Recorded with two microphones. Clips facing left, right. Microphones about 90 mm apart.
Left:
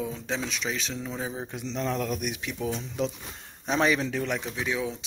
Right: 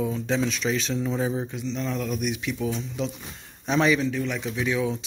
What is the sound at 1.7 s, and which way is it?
Speech, 55° left (ahead or behind).